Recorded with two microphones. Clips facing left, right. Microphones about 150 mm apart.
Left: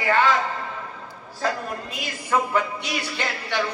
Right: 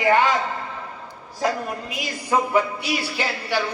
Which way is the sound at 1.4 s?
15° right (ahead or behind).